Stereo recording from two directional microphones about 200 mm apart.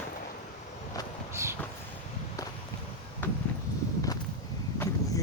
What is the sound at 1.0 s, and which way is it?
Vehicle, 20° left (ahead or behind).